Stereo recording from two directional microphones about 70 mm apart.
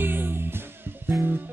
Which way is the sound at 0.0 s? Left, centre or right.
Right.